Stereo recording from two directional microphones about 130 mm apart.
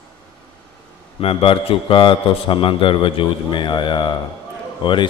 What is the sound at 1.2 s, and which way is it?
A man's voice, 45° left (ahead or behind).